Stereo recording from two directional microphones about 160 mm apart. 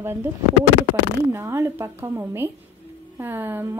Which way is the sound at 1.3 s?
15° right (ahead or behind).